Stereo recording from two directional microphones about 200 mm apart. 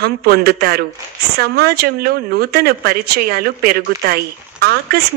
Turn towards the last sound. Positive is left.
turn(degrees=-50)  # may be behind; listen again after turning